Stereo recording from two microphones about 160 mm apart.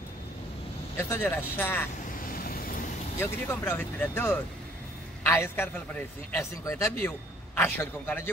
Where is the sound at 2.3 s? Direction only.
65° left (ahead or behind).